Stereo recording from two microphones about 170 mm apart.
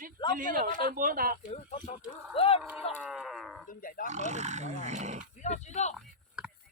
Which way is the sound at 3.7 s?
55° left (ahead or behind).